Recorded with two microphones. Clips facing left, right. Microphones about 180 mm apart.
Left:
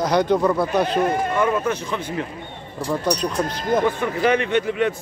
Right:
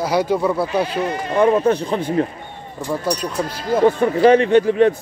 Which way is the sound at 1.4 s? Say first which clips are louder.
Right 6 dB; 35° right (ahead or behind).